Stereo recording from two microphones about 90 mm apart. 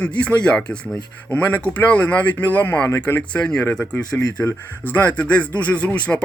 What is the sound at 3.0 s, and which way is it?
Speech, 15° left (ahead or behind).